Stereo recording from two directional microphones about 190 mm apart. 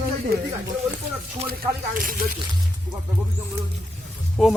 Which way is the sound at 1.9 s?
50° right (ahead or behind).